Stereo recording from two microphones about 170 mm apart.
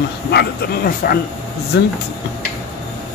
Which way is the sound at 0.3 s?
65° left (ahead or behind).